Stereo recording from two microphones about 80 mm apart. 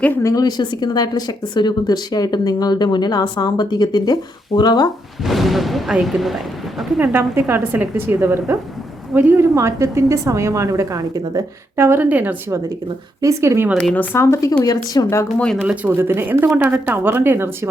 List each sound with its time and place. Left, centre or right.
0.2 s speech: left
0.4 s a woman's voice: left
5.2 s speech: centre
7.0 s a woman's voice: right
11.8 s a woman's voice: right
13.2 s a woman's voice: right
13.9 s speech: left
14.2 s speech: left
14.6 s a woman's voice: left
15.6 s a woman's voice: centre